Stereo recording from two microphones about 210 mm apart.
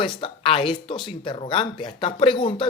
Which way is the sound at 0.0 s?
25° left (ahead or behind).